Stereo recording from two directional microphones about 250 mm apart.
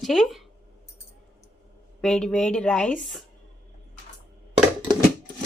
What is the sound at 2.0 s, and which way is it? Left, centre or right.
Speech, centre.